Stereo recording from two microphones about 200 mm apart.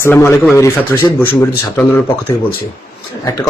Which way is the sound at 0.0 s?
10° left (ahead or behind).